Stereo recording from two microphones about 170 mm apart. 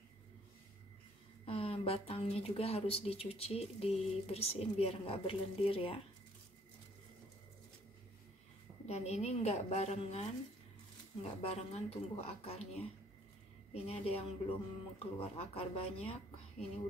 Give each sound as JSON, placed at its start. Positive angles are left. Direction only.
{"t": 1.4, "sound": "speech", "side_deg": 35}
{"t": 8.8, "sound": "speech", "side_deg": 40}
{"t": 11.4, "sound": "speech", "side_deg": 40}
{"t": 13.7, "sound": "speech", "side_deg": 35}